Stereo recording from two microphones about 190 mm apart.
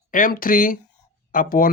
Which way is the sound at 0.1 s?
45° left (ahead or behind).